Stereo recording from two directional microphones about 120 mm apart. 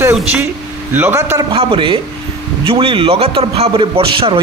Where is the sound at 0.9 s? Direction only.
20° right (ahead or behind).